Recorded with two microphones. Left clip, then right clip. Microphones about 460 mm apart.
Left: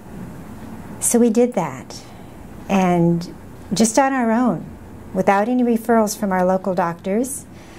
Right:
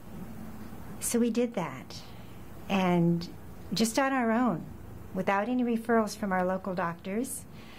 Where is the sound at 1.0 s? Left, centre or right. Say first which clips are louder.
Left 13 dB; left.